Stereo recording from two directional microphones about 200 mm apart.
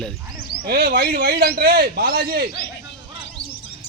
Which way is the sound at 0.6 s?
50° right (ahead or behind).